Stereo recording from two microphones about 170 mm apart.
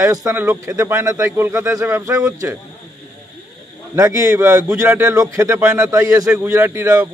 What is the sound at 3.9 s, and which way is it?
A man's voice, 15° right (ahead or behind).